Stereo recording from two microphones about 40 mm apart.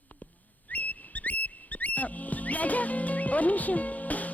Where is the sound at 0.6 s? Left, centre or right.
Left.